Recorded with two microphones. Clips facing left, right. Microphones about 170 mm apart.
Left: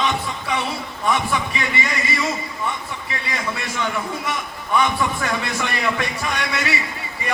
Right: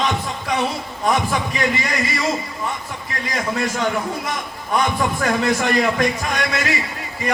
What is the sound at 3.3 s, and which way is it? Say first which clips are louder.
A man's voice: right 5 dB; 40° right (ahead or behind).